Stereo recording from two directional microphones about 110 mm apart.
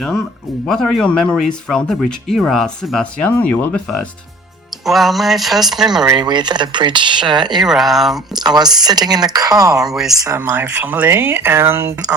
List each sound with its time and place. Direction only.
0.7 s speech: 5° left (ahead or behind)
4.9 s speech: centre (ahead or behind)
6.1 s speech: 40° right (ahead or behind)
7.6 s speech: centre (ahead or behind)
8.4 s speech: 40° right (ahead or behind)
9.8 s speech: 5° right (ahead or behind)
10.3 s speech: 15° right (ahead or behind)